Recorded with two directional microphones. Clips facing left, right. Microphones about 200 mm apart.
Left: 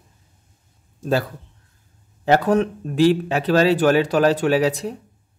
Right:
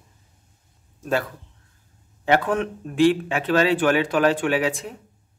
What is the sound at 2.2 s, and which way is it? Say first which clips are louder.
Speech: left 4 dB; 40° left (ahead or behind).